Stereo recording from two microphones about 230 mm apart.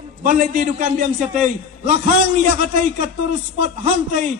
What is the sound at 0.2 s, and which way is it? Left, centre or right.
Speech, right.